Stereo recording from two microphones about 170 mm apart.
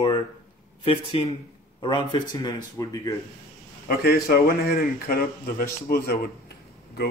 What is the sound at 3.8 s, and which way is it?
A man's voice, 65° left (ahead or behind).